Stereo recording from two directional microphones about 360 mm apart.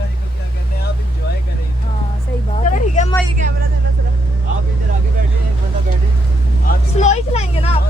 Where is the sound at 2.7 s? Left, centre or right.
Centre.